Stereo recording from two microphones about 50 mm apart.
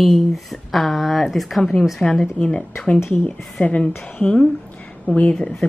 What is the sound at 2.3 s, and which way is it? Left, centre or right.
Speech, left.